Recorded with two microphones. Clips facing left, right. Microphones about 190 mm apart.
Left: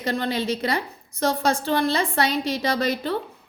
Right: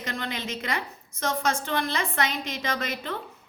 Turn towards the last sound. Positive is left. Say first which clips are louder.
# left 7 dB
turn(degrees=35)  # may be behind; listen again after turning